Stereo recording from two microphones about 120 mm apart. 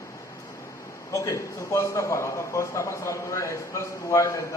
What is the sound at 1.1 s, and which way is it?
A man's voice, 25° left (ahead or behind).